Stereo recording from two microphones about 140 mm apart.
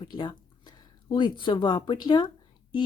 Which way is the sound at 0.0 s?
35° left (ahead or behind).